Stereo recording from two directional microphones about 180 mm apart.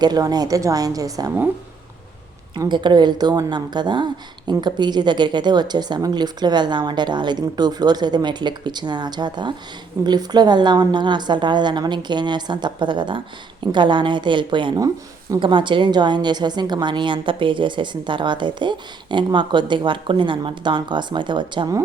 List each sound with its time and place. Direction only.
0.0 s a woman's voice: 20° right (ahead or behind)
2.6 s a woman's voice: 25° right (ahead or behind)